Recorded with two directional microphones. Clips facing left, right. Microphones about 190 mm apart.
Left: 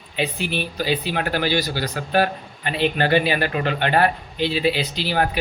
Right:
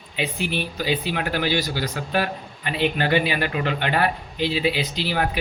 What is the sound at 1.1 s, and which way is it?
A man's voice, 40° left (ahead or behind).